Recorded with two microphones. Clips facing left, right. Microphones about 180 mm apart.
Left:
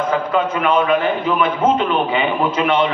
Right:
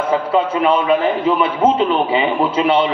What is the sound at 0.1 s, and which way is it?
A man's voice, 30° right (ahead or behind).